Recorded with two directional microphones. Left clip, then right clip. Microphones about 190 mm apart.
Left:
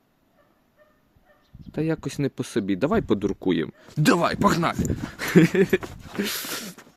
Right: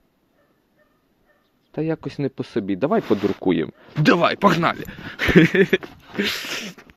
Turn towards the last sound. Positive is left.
turn(degrees=0)  # may be behind; listen again after turning